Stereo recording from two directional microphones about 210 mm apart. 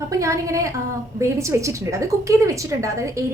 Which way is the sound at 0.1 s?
15° right (ahead or behind).